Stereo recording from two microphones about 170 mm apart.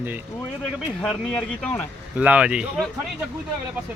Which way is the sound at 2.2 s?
10° right (ahead or behind).